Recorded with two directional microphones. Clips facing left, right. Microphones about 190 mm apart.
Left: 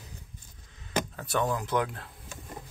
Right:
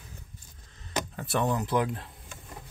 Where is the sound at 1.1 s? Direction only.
Centre (ahead or behind).